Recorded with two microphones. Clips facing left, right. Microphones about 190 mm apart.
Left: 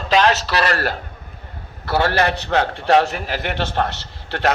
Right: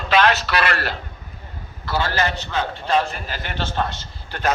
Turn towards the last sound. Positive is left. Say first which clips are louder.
# left 4 dB
turn(degrees=75)  # may be behind; listen again after turning